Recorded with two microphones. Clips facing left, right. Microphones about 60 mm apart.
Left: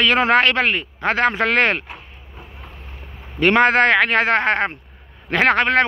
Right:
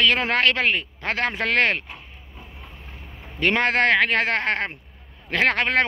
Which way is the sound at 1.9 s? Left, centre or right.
Centre.